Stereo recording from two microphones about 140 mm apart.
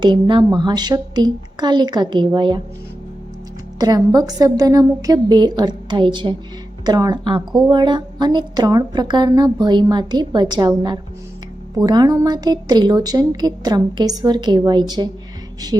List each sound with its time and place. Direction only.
0.0 s a woman's voice: 35° right (ahead or behind)
3.8 s a woman's voice: 30° right (ahead or behind)
11.8 s a woman's voice: 30° right (ahead or behind)